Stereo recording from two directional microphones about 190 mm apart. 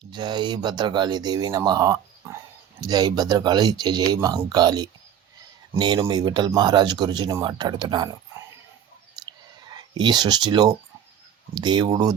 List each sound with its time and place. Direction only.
0.1 s speech: 25° right (ahead or behind)
9.7 s speech: 25° right (ahead or behind)